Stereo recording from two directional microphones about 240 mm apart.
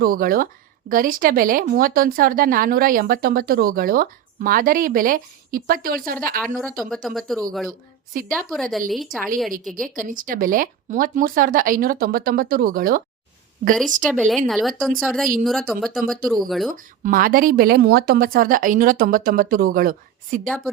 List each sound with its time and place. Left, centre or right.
0.0 s speech: right
6.4 s speech: centre
8.4 s speech: centre
9.9 s speech: right
14.1 s speech: centre
16.7 s speech: right